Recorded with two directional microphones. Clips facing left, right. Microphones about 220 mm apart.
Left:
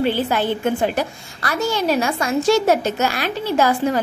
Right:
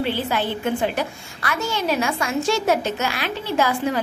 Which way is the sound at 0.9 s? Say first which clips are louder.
Left 3 dB; 40° left (ahead or behind).